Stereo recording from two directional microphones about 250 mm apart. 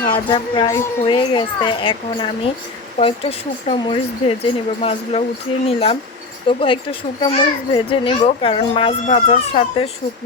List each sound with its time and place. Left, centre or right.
0.0 s a child's voice: centre